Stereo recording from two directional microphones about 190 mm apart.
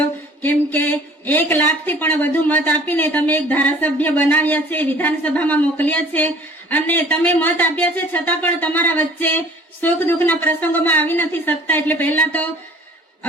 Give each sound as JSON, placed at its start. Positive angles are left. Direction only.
{"t": 0.4, "sound": "speech", "side_deg": 10}